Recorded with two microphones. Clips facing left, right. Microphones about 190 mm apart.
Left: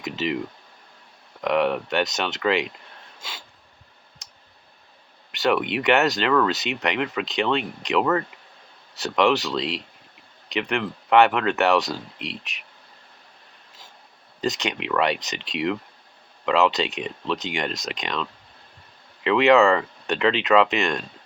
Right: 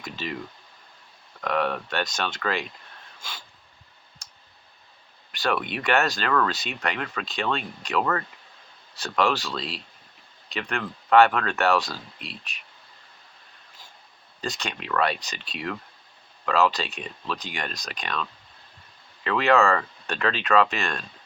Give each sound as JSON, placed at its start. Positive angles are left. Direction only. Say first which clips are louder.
{"t": 0.0, "sound": "speech", "louder": "left 7 dB", "side_deg": 20}
{"t": 1.4, "sound": "speech", "louder": "left 5 dB", "side_deg": 20}
{"t": 3.2, "sound": "a sound", "louder": "left 1 dB", "side_deg": 20}
{"t": 5.3, "sound": "speech", "louder": "left 5 dB", "side_deg": 20}
{"t": 14.4, "sound": "speech", "louder": "left 6 dB", "side_deg": 20}
{"t": 16.5, "sound": "speech", "louder": "left 3 dB", "side_deg": 20}